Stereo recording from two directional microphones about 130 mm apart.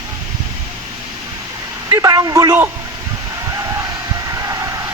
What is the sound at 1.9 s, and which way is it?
Speech, 25° right (ahead or behind).